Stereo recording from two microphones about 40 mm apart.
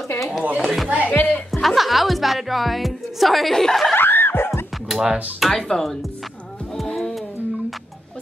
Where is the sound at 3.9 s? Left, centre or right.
Left.